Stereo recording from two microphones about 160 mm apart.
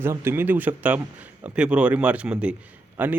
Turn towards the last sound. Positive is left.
turn(degrees=-10)  # may be behind; listen again after turning